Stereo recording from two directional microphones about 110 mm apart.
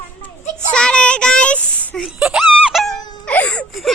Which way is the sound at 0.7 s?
10° left (ahead or behind).